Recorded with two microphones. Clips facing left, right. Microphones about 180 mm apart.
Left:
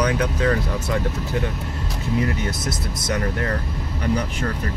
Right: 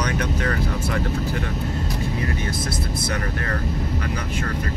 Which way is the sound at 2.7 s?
25° left (ahead or behind).